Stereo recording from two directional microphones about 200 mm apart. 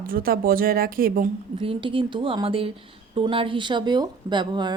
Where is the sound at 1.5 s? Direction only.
25° right (ahead or behind).